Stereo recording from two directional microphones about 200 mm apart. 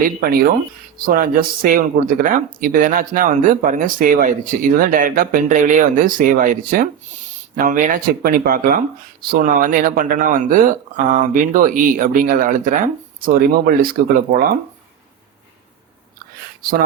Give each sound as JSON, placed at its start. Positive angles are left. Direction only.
{"t": 0.0, "sound": "speech", "side_deg": -50}